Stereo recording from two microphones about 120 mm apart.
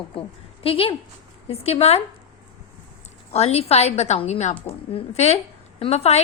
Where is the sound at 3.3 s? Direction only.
60° left (ahead or behind).